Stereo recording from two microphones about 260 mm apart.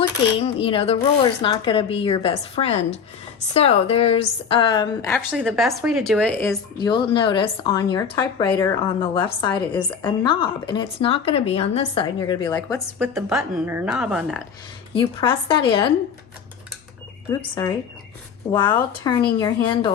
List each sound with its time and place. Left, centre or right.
0.3 s speech: left
5.1 s speech: centre
13.0 s speech: centre
14.9 s speech: centre
17.2 s speech: centre